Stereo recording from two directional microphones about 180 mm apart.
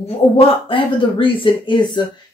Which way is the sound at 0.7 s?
30° left (ahead or behind).